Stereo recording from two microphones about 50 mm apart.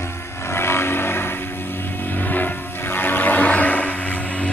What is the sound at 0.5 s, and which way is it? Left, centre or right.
Vehicle, left.